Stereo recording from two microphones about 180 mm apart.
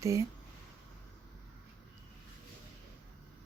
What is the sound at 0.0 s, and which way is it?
Speech, 15° right (ahead or behind).